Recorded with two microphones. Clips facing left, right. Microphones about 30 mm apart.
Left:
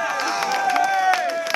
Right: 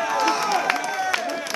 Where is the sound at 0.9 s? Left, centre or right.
Left.